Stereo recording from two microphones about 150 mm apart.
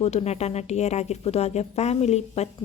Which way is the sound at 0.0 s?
45° left (ahead or behind).